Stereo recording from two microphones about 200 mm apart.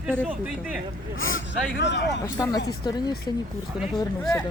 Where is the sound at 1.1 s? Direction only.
75° left (ahead or behind).